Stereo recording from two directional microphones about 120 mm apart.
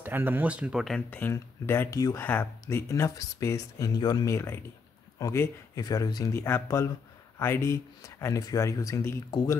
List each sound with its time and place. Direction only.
0.0 s speech: 15° right (ahead or behind)
1.1 s speech: 15° left (ahead or behind)
2.1 s speech: 15° left (ahead or behind)